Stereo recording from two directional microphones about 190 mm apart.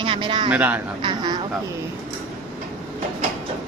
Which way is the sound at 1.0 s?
25° right (ahead or behind).